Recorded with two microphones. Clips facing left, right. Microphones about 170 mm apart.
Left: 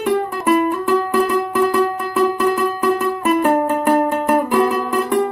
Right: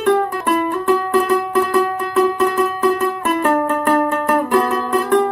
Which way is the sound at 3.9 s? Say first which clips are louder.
Left 1 dB; 10° left (ahead or behind).